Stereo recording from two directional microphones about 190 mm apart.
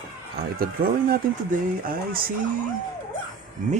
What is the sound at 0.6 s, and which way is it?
Speech, 50° right (ahead or behind).